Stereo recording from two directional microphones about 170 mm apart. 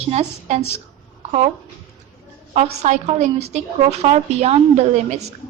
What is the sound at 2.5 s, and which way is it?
A woman's voice, 40° right (ahead or behind).